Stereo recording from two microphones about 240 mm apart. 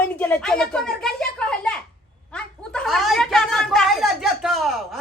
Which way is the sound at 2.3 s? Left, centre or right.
Centre.